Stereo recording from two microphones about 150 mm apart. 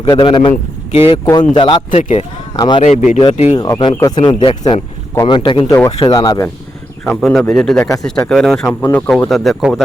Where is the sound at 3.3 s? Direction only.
50° left (ahead or behind).